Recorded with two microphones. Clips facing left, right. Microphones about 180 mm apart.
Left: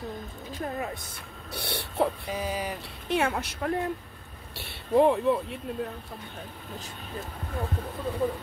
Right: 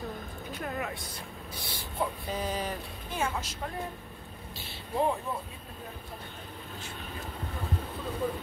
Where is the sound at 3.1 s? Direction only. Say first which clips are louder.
Left 6 dB; 65° left (ahead or behind).